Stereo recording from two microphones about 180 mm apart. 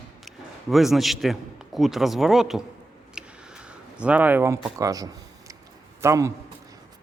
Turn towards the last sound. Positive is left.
turn(degrees=-15)  # may be behind; listen again after turning